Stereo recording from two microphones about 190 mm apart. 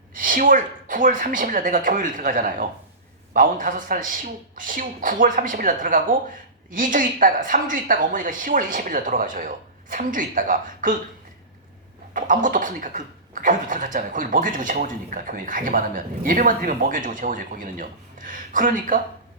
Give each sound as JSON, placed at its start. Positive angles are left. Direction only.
{"t": 0.1, "sound": "speech", "side_deg": -45}
{"t": 12.1, "sound": "speech", "side_deg": -45}